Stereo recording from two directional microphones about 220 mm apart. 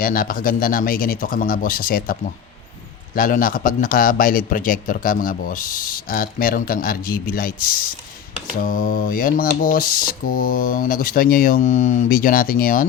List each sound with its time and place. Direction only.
0.0 s a man's voice: 40° left (ahead or behind)
3.2 s a man's voice: 40° left (ahead or behind)